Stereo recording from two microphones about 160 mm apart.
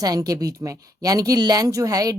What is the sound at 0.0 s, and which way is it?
Speech, 25° right (ahead or behind).